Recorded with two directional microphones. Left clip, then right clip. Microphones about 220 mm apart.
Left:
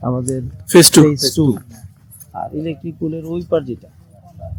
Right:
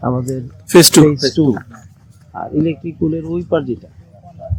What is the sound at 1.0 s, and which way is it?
Speech, 50° left (ahead or behind).